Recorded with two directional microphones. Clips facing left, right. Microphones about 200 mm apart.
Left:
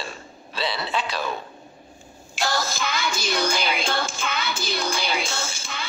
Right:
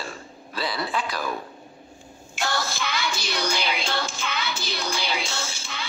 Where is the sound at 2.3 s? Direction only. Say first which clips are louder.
Left 2 dB; 40° left (ahead or behind).